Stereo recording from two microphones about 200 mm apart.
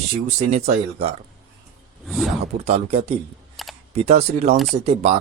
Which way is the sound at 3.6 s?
Centre (ahead or behind).